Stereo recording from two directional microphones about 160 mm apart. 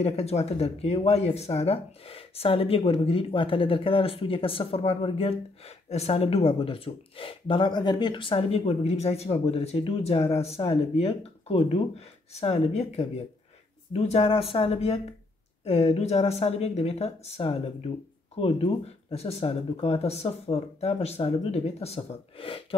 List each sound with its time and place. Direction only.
0.0 s speech: 40° left (ahead or behind)